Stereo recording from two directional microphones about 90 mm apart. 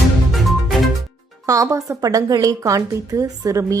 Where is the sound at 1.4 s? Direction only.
40° right (ahead or behind).